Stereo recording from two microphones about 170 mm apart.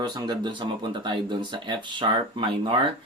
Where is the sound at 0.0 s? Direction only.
25° right (ahead or behind).